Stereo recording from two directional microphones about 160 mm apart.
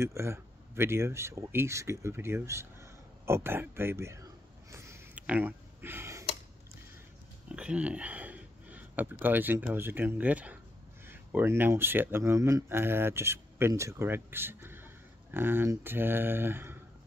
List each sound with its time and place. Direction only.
0.0 s speech: 15° right (ahead or behind)
4.6 s a sound: 15° right (ahead or behind)
7.4 s speech: 5° right (ahead or behind)